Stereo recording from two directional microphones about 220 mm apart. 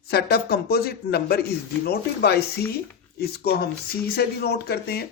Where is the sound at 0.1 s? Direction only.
45° left (ahead or behind).